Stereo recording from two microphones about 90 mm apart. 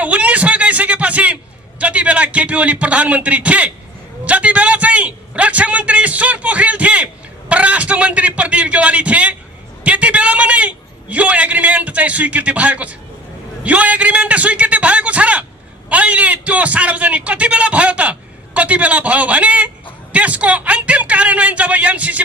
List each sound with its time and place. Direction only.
0.0 s a man's voice: 15° right (ahead or behind)